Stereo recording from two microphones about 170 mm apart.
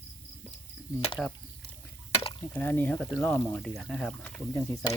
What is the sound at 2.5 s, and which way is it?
Speech, 10° left (ahead or behind).